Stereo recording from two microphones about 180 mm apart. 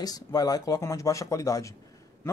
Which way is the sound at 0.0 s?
20° left (ahead or behind).